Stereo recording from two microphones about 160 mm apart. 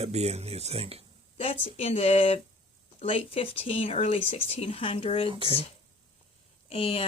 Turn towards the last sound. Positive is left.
turn(degrees=35)  # may be behind; listen again after turning